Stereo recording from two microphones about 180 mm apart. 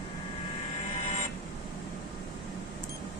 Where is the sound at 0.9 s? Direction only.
40° left (ahead or behind).